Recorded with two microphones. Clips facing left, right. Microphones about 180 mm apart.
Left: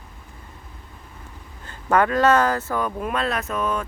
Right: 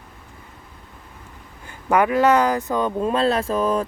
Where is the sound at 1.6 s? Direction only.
10° right (ahead or behind).